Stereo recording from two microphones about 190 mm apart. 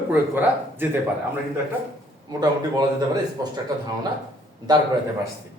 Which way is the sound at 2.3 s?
20° right (ahead or behind).